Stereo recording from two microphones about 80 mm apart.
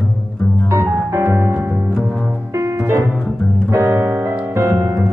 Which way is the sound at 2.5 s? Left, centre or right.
Right.